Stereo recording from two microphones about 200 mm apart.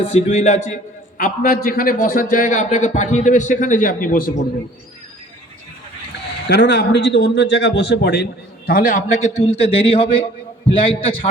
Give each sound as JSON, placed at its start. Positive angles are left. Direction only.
{"t": 0.1, "sound": "a man's voice", "side_deg": 35}
{"t": 6.5, "sound": "a man's voice", "side_deg": 55}